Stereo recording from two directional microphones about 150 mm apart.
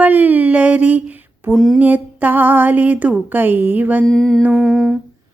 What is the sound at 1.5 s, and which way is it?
Humming, centre (ahead or behind).